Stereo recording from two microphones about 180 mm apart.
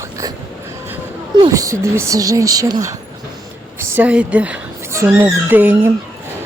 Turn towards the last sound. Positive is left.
turn(degrees=-10)  # may be behind; listen again after turning